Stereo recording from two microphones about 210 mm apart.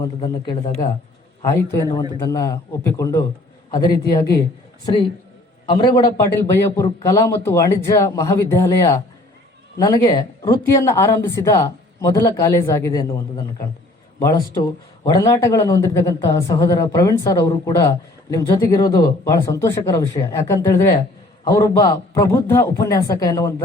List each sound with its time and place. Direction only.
0.0 s a woman's voice: 20° left (ahead or behind)
5.6 s a woman's voice: 20° left (ahead or behind)